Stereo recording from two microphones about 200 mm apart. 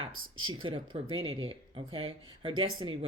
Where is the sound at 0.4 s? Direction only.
25° right (ahead or behind).